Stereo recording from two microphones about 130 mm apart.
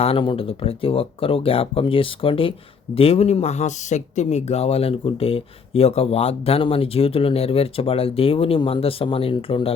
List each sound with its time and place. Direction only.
0.0 s speech: 45° left (ahead or behind)